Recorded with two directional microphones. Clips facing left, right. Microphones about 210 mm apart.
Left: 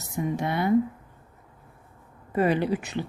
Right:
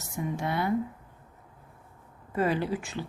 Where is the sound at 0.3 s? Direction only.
20° left (ahead or behind).